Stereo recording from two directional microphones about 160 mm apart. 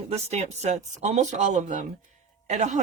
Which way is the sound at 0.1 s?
40° right (ahead or behind).